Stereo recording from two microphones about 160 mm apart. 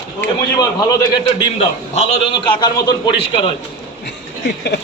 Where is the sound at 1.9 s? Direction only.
40° left (ahead or behind).